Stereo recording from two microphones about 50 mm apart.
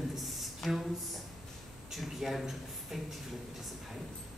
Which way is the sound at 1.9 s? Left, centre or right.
Centre.